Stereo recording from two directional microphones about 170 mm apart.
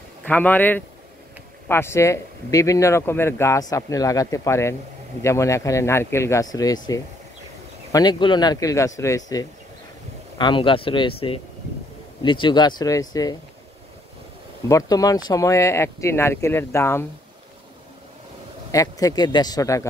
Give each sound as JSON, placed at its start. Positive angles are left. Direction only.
{"t": 0.3, "sound": "speech", "side_deg": 10}
{"t": 14.7, "sound": "speech", "side_deg": 20}
{"t": 18.7, "sound": "speech", "side_deg": 20}